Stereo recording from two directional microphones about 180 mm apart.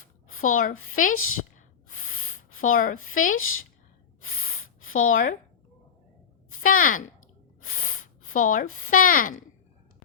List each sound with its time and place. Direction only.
0.3 s a woman's voice: 45° left (ahead or behind)
4.9 s a woman's voice: 50° left (ahead or behind)
6.6 s a woman's voice: 50° left (ahead or behind)